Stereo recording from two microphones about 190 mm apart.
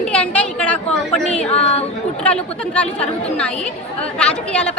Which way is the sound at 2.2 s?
5° left (ahead or behind).